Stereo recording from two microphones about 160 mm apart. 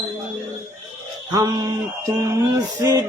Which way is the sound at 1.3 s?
25° right (ahead or behind).